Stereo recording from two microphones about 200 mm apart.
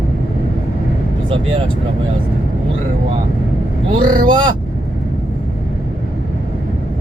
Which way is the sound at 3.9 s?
25° right (ahead or behind).